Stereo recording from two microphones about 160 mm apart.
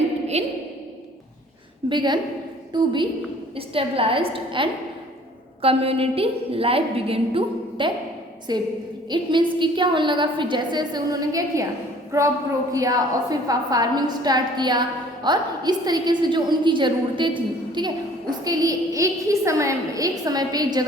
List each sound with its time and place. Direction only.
0.4 s a woman's voice: 45° right (ahead or behind)
1.9 s a woman's voice: 30° right (ahead or behind)